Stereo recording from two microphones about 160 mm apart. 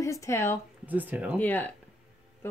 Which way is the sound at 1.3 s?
10° left (ahead or behind).